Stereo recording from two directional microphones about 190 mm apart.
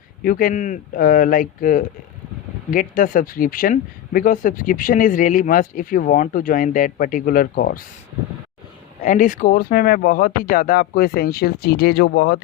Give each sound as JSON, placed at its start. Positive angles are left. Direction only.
{"t": 0.2, "sound": "speech", "side_deg": 50}
{"t": 9.0, "sound": "speech", "side_deg": 40}